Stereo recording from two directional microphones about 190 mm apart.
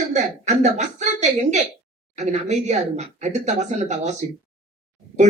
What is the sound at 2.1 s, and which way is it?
Speech, 35° right (ahead or behind).